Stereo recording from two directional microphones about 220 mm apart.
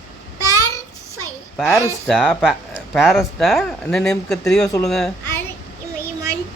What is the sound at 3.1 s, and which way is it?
A child's voice, 10° left (ahead or behind).